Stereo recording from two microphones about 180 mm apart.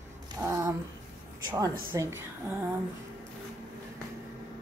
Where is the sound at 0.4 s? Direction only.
20° right (ahead or behind).